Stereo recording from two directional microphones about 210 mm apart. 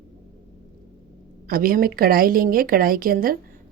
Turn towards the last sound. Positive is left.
turn(degrees=-45)  # may be behind; listen again after turning